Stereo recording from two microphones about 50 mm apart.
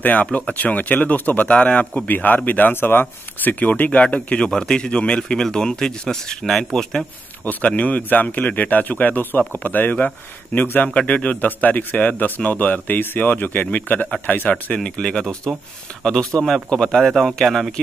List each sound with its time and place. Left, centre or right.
0.0 s speech: left
2.0 s a man's voice: left; by 7.1 s centre
7.4 s speech: left
10.9 s speech: left
15.0 s speech: centre
17.1 s speech: centre